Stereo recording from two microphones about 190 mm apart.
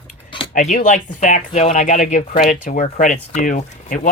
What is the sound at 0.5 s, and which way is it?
Speech, 45° left (ahead or behind).